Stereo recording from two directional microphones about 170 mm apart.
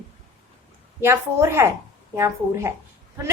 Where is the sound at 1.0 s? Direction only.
15° right (ahead or behind).